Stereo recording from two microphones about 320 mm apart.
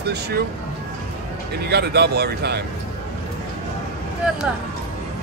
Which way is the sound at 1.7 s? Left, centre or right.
Right.